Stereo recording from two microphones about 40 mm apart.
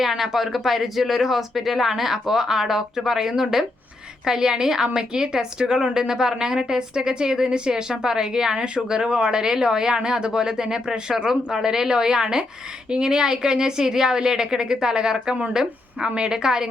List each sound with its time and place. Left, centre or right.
0.1 s a woman's voice: centre